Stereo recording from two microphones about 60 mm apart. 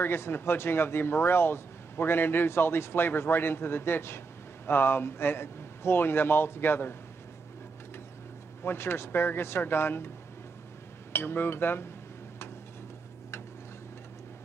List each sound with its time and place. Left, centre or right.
0.0 s speech: left
8.6 s speech: left
11.1 s speech: left